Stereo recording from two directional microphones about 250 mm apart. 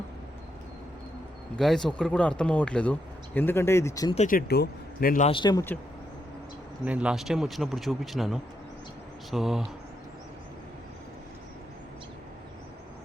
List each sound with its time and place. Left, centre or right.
1.5 s speech: centre
4.1 s speech: left
5.3 s speech: centre
6.8 s speech: centre